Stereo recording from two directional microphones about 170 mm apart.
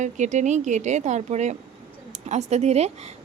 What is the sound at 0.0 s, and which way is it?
Speech, 45° right (ahead or behind).